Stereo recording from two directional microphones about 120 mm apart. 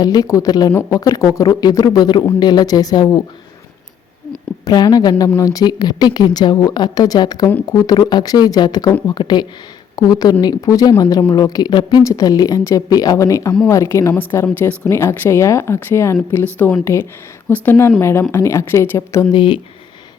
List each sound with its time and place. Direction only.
0.0 s speech: 30° left (ahead or behind)
4.6 s a woman's voice: 35° left (ahead or behind)
19.3 s speech: 40° left (ahead or behind)